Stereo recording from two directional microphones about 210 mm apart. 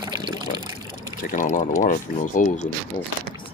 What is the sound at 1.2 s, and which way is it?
Speech, 40° left (ahead or behind).